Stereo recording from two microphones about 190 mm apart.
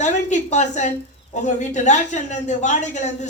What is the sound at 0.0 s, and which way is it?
A woman's voice, 40° left (ahead or behind).